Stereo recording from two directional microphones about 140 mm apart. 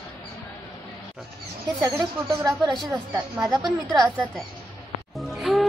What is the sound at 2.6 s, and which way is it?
Speech, 30° right (ahead or behind).